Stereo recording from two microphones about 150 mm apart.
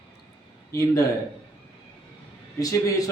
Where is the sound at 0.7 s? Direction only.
20° left (ahead or behind).